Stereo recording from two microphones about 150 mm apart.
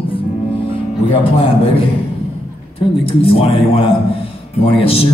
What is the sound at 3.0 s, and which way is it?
Music, 40° left (ahead or behind).